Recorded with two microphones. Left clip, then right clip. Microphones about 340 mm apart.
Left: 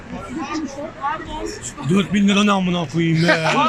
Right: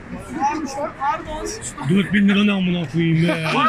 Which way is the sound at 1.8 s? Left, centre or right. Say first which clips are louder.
Even; centre.